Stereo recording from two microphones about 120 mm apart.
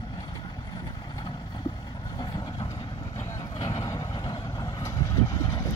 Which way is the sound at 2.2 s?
35° left (ahead or behind).